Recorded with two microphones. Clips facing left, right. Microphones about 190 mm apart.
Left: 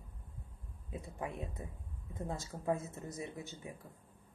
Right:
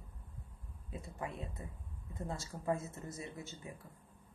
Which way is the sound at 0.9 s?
20° left (ahead or behind).